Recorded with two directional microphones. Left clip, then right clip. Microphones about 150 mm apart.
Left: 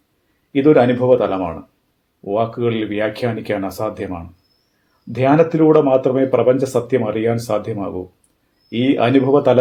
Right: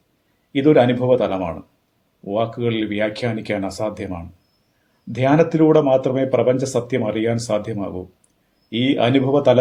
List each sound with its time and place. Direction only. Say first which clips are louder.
0.5 s speech: left 2 dB; 35° left (ahead or behind)